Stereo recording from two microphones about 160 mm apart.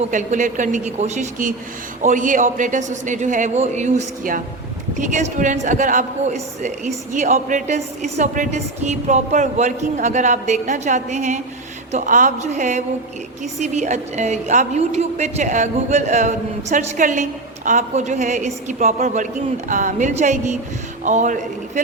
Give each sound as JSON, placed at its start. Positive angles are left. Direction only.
{"t": 0.1, "sound": "a man's voice", "side_deg": -50}